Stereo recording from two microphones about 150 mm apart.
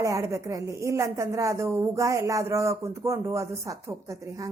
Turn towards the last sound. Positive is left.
turn(degrees=-20)  # may be behind; listen again after turning